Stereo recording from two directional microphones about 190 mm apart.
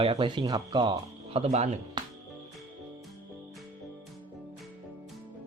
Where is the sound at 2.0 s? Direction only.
25° right (ahead or behind).